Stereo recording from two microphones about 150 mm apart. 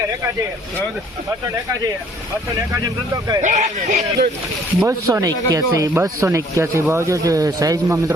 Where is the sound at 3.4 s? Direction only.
55° right (ahead or behind).